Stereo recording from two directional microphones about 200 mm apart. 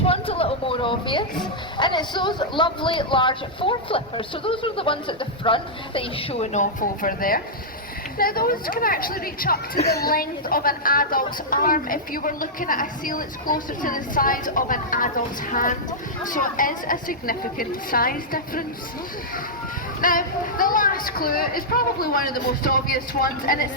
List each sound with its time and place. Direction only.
0.0 s speech: 30° left (ahead or behind); by 18.6 s 45° left (ahead or behind)
20.0 s speech: 45° left (ahead or behind)